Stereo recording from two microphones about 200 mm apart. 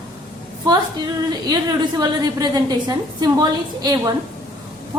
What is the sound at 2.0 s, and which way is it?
A woman's voice, 20° right (ahead or behind).